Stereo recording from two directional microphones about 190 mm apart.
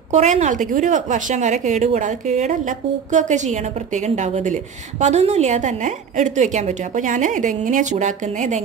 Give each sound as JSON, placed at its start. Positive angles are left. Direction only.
{"t": 0.1, "sound": "a woman's voice", "side_deg": -35}